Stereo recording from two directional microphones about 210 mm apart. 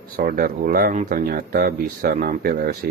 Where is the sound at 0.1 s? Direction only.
45° right (ahead or behind).